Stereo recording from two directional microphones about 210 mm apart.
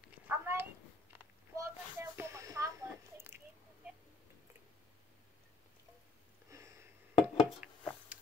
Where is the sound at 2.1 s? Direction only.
15° right (ahead or behind).